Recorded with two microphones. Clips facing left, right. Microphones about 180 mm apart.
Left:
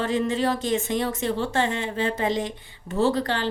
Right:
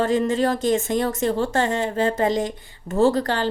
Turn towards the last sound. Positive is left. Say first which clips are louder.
# right 4 dB
turn(degrees=-45)  # may be behind; listen again after turning